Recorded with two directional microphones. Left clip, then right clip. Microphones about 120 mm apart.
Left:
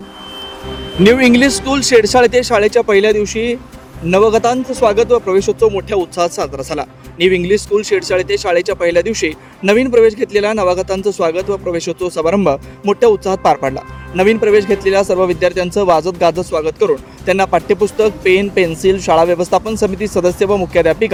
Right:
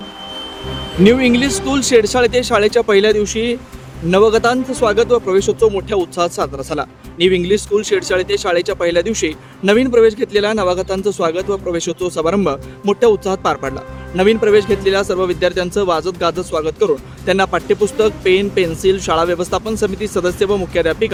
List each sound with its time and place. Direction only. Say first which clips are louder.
1.0 s speech: left 3 dB; 50° left (ahead or behind); by 21.1 s 35° left (ahead or behind)